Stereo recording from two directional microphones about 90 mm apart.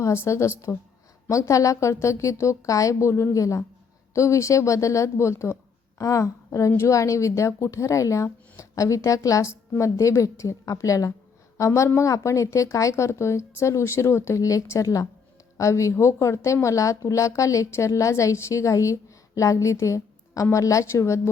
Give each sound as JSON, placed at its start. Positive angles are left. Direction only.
{"t": 0.0, "sound": "a woman's voice", "side_deg": 35}